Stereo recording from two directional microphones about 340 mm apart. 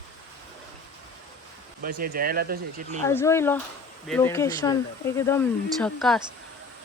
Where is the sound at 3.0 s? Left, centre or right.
Centre.